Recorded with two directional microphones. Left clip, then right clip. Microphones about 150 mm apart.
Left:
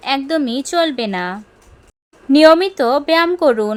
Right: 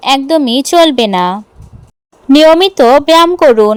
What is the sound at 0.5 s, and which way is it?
Speech, 45° right (ahead or behind).